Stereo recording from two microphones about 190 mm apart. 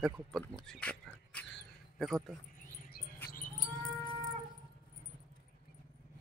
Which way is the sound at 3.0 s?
50° left (ahead or behind).